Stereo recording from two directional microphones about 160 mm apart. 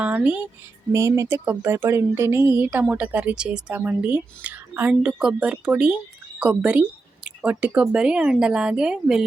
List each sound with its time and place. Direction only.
0.0 s speech: 10° right (ahead or behind)